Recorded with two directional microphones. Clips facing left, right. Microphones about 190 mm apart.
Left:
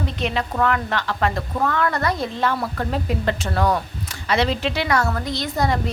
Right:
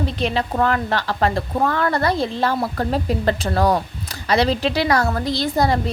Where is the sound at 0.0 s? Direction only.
30° right (ahead or behind).